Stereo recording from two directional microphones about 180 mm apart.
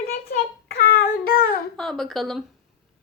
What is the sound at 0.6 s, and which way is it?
Child singing, 55° left (ahead or behind).